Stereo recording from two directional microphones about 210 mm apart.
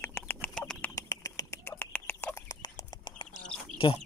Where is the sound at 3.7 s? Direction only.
25° left (ahead or behind).